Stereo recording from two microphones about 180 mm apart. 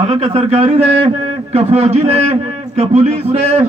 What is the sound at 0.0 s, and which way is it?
A man's voice, 35° right (ahead or behind).